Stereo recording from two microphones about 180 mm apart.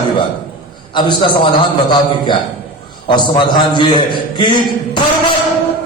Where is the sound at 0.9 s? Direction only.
25° left (ahead or behind).